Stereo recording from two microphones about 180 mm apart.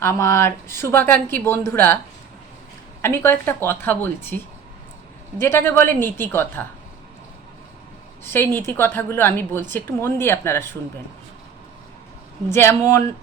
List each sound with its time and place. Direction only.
0.0 s a woman's voice: 15° left (ahead or behind)
3.0 s a woman's voice: 15° left (ahead or behind)
5.4 s a woman's voice: 10° left (ahead or behind)
8.2 s a woman's voice: 10° left (ahead or behind)
12.5 s a woman's voice: 15° left (ahead or behind)